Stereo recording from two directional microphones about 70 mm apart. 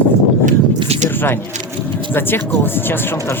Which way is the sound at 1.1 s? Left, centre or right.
Left.